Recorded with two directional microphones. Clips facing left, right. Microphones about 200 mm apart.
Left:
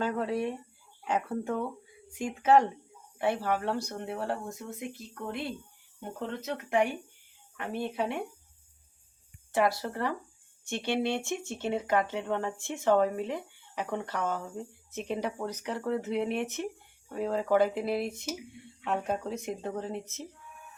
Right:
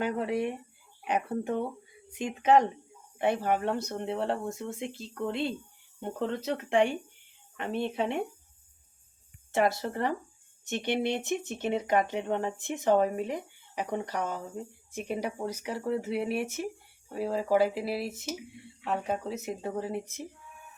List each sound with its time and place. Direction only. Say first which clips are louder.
0.0 s speech: right 1 dB; 15° right (ahead or behind)
9.5 s speech: right 1 dB; 25° right (ahead or behind)